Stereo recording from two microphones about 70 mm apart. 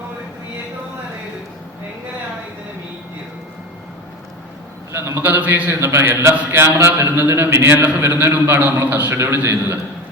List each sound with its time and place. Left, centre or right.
4.9 s a man's voice: right
5.2 s a man's voice: right
5.7 s a man's voice: right